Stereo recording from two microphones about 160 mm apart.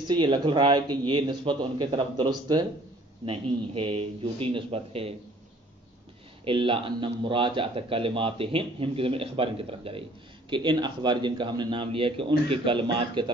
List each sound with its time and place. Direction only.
0.1 s a man's voice: 30° right (ahead or behind)
6.4 s a man's voice: 30° right (ahead or behind)